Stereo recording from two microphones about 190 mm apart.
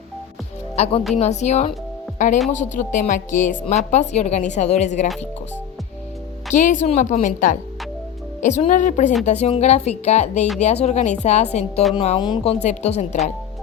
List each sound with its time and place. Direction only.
0.8 s speech: 35° left (ahead or behind)
6.5 s a woman's voice: 40° left (ahead or behind)